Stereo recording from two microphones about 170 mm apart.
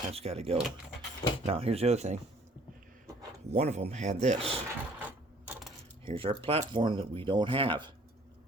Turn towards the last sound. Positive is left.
turn(degrees=-30)  # may be behind; listen again after turning